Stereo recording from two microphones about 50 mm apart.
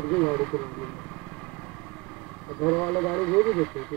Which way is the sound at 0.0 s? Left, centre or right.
Centre.